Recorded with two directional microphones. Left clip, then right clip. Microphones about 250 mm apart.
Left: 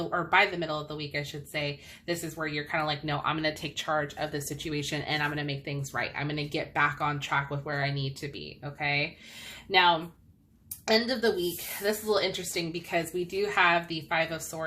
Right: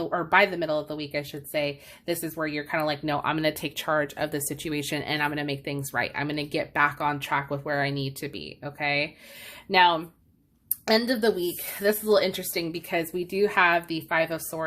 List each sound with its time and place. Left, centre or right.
0.1 s speech: right